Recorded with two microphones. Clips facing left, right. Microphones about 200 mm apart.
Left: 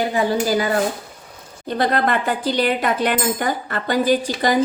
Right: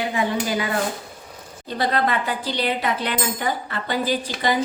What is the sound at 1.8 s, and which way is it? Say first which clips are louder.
Speech: left 3 dB; 50° left (ahead or behind).